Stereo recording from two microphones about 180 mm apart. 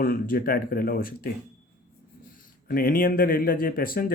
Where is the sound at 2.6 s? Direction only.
55° left (ahead or behind).